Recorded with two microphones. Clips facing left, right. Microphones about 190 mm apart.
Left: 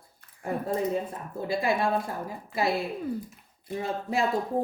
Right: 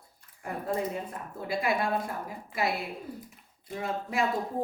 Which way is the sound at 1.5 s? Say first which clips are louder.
Left 2 dB; 25° left (ahead or behind).